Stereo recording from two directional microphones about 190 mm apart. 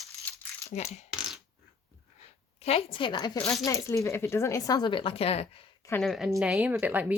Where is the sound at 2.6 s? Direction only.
30° left (ahead or behind).